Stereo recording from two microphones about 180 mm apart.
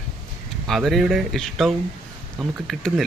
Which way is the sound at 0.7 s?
Centre (ahead or behind).